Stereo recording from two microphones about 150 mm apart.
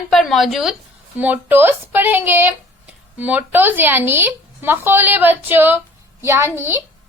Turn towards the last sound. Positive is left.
turn(degrees=-15)  # may be behind; listen again after turning